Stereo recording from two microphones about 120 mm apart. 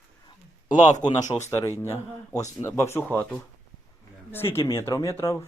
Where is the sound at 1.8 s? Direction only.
25° left (ahead or behind).